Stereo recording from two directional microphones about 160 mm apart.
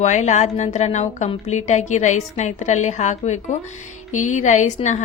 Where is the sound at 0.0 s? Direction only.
45° left (ahead or behind).